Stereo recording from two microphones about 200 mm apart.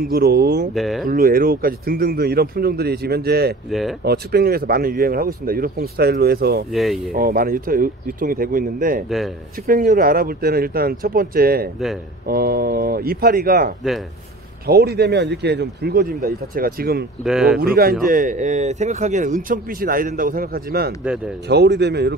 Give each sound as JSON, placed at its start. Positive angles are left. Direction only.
{"t": 0.1, "sound": "speech", "side_deg": -50}
{"t": 0.7, "sound": "speech", "side_deg": 0}
{"t": 1.0, "sound": "speech", "side_deg": -45}
{"t": 6.7, "sound": "speech", "side_deg": 0}
{"t": 7.1, "sound": "speech", "side_deg": -45}
{"t": 17.2, "sound": "speech", "side_deg": -5}
{"t": 17.6, "sound": "speech", "side_deg": -50}